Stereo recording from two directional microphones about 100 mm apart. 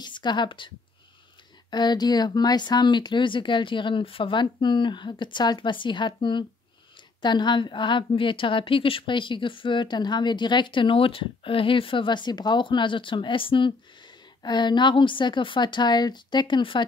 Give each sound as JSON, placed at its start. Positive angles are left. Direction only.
{"t": 0.0, "sound": "a woman's voice", "side_deg": 50}
{"t": 1.7, "sound": "a woman's voice", "side_deg": 45}
{"t": 14.4, "sound": "speech", "side_deg": 50}